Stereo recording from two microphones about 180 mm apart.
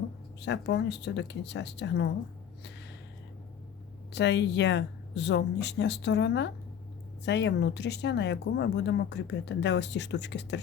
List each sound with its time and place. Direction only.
0.3 s speech: 70° left (ahead or behind)
4.1 s speech: 75° left (ahead or behind)